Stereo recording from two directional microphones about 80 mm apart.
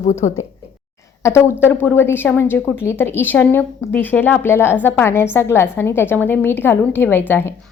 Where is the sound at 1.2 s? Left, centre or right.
Left.